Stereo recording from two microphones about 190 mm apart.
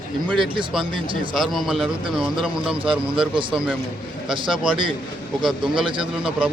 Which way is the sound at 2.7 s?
25° right (ahead or behind).